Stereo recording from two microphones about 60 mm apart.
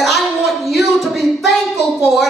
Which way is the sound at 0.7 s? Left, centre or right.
Centre.